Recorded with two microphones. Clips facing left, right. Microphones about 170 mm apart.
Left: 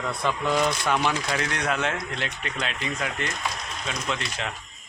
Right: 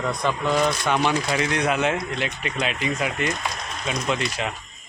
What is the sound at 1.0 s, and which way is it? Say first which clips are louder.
Speech: right 4 dB; 10° right (ahead or behind).